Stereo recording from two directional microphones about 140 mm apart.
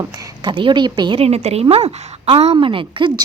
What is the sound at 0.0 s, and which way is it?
A woman's voice, 25° right (ahead or behind).